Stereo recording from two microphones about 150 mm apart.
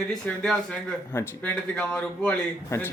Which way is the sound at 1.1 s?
15° left (ahead or behind).